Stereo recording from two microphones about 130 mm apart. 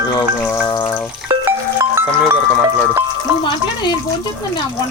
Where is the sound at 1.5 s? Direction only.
20° right (ahead or behind).